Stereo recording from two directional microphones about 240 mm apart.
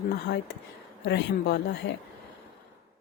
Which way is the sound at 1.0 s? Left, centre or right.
Left.